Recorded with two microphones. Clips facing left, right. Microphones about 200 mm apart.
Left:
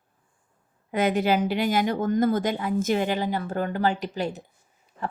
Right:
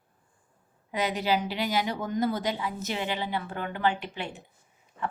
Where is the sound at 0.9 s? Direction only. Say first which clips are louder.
Left 5 dB; 50° left (ahead or behind).